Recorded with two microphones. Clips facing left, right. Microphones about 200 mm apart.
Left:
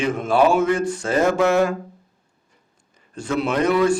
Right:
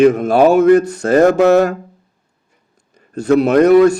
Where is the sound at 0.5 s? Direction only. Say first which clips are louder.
Right 9 dB; 65° right (ahead or behind).